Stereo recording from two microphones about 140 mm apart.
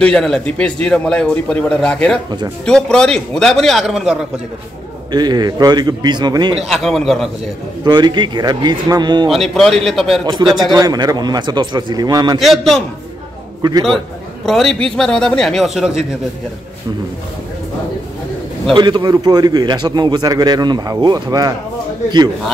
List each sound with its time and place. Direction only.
0.0 s a man's voice: 5° left (ahead or behind)
5.1 s speech: 30° right (ahead or behind)
6.6 s a man's voice: centre (ahead or behind)
7.8 s speech: 30° right (ahead or behind)
9.3 s a man's voice: centre (ahead or behind)
10.2 s a man's voice: 30° right (ahead or behind)
12.4 s a man's voice: centre (ahead or behind)
13.6 s a man's voice: 30° right (ahead or behind)
13.8 s a man's voice: centre (ahead or behind)
18.7 s a man's voice: 35° right (ahead or behind)